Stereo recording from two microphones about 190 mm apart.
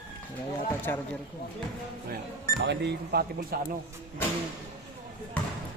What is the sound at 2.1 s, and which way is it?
Speech, 60° right (ahead or behind).